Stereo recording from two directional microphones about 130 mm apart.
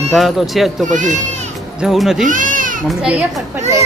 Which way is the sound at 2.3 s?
90° right.